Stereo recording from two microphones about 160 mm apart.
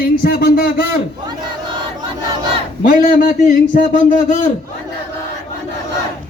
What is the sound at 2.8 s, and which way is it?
A man's voice, 60° left (ahead or behind).